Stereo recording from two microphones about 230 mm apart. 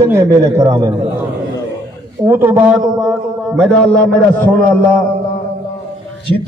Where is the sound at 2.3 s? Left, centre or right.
Centre.